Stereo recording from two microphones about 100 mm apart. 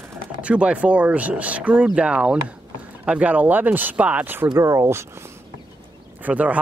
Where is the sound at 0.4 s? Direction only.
10° right (ahead or behind).